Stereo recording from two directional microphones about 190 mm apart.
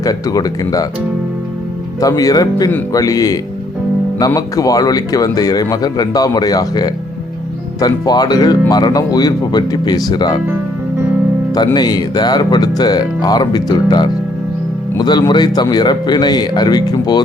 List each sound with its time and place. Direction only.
0.0 s speech: 20° left (ahead or behind)
2.0 s speech: 20° left (ahead or behind)
11.5 s speech: 20° left (ahead or behind)